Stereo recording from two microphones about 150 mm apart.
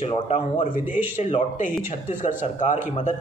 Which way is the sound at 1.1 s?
55° left (ahead or behind).